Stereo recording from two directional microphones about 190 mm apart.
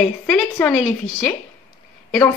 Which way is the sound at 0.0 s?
Centre (ahead or behind).